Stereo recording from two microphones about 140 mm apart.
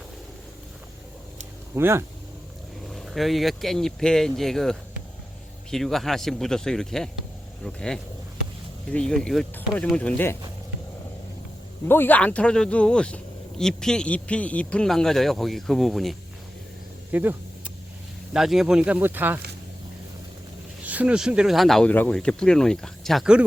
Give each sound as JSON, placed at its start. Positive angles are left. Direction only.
{"t": 1.7, "sound": "speech", "side_deg": -20}
{"t": 2.8, "sound": "speech", "side_deg": 0}
{"t": 11.9, "sound": "speech", "side_deg": 15}
{"t": 17.1, "sound": "vehicle", "side_deg": -10}
{"t": 18.3, "sound": "speech", "side_deg": 0}
{"t": 20.8, "sound": "speech", "side_deg": -10}